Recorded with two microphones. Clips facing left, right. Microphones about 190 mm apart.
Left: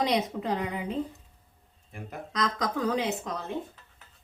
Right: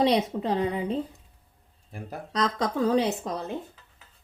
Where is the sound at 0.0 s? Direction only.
30° right (ahead or behind).